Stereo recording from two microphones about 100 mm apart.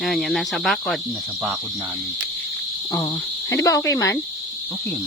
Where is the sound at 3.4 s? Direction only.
35° left (ahead or behind).